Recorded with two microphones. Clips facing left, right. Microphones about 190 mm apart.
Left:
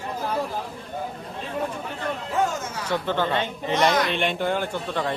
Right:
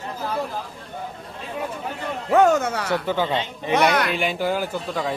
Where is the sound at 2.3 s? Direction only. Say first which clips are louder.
Right 11 dB; 70° right (ahead or behind).